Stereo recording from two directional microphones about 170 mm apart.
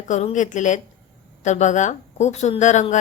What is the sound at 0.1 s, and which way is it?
A woman's voice, 45° left (ahead or behind).